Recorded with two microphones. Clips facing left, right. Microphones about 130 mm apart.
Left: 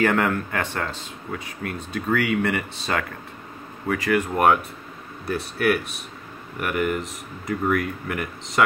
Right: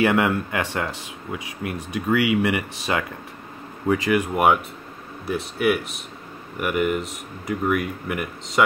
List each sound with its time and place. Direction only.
0.0 s speech: 10° right (ahead or behind)
5.2 s speech: 5° right (ahead or behind)